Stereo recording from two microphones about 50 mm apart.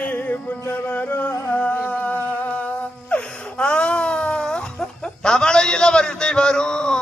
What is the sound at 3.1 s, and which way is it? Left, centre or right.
Wail, left.